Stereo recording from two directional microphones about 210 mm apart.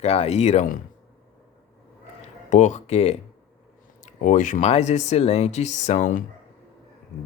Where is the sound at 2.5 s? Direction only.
35° left (ahead or behind).